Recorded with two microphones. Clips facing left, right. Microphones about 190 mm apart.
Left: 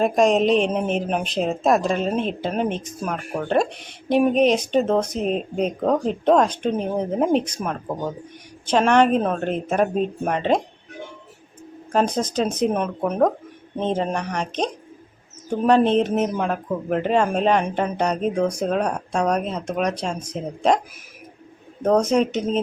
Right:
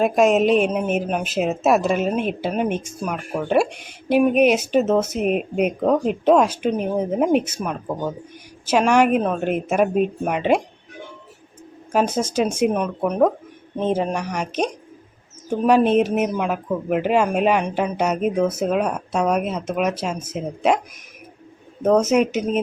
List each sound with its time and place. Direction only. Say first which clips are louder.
0.0 s a woman's voice: right 1 dB; 5° right (ahead or behind)
9.2 s speech: right 1 dB; centre (ahead or behind)
9.5 s a woman's voice: right 2 dB; 10° right (ahead or behind)
11.9 s a woman's voice: right 1 dB; 5° right (ahead or behind)
12.7 s a woman's voice: right 1 dB; centre (ahead or behind)
21.8 s a woman's voice: right 2 dB; 5° right (ahead or behind)